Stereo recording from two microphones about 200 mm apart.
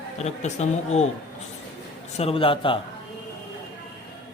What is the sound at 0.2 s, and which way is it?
Speech, 35° left (ahead or behind).